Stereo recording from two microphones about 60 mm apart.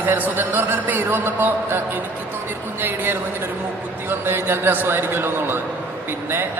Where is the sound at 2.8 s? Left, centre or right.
Right.